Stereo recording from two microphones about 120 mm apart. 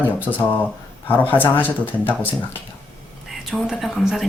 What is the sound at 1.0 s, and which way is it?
Speech, 15° left (ahead or behind).